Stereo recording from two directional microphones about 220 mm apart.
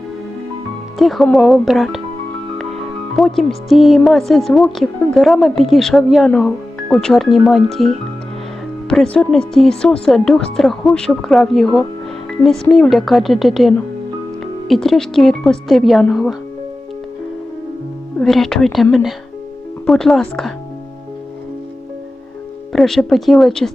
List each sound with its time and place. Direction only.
0.9 s a woman's voice: centre (ahead or behind)
3.2 s a woman's voice: centre (ahead or behind)
18.2 s a woman's voice: centre (ahead or behind)
22.7 s a woman's voice: centre (ahead or behind)